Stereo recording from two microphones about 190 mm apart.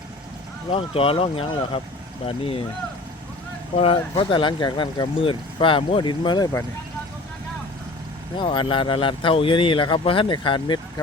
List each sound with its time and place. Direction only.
0.7 s speech: 30° left (ahead or behind)
3.8 s speech: 30° left (ahead or behind)
8.4 s speech: 25° left (ahead or behind)